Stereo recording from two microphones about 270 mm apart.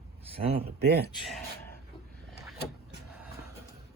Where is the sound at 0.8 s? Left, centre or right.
Right.